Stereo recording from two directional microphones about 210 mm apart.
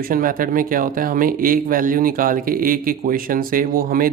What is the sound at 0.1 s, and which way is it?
Speech, 40° right (ahead or behind).